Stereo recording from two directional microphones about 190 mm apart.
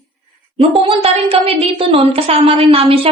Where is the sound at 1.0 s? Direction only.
30° right (ahead or behind).